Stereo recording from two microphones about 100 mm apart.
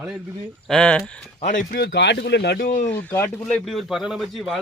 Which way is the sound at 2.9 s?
20° left (ahead or behind).